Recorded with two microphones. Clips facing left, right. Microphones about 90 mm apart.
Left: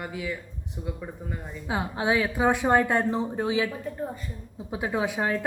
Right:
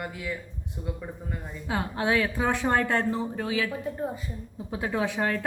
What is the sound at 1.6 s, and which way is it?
A woman's voice, 10° left (ahead or behind).